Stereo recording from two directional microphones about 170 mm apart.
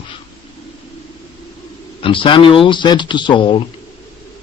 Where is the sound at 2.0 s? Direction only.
30° left (ahead or behind).